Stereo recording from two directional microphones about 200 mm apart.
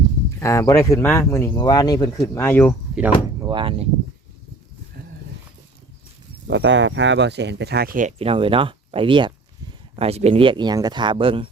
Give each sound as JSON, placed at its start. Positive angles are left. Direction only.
{"t": 0.3, "sound": "speech", "side_deg": 15}
{"t": 2.9, "sound": "door", "side_deg": -10}
{"t": 3.5, "sound": "speech", "side_deg": -25}
{"t": 6.5, "sound": "speech", "side_deg": -65}
{"t": 8.2, "sound": "speech", "side_deg": -25}